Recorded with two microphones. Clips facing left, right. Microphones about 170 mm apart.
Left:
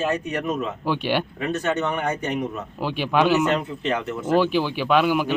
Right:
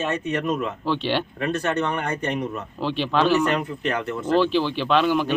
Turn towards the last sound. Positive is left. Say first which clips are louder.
# left 1 dB
turn(degrees=10)  # may be behind; listen again after turning